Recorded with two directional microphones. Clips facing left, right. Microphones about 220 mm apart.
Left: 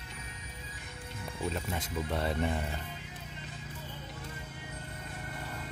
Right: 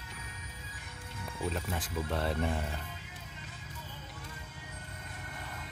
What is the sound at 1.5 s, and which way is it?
Speech, centre (ahead or behind).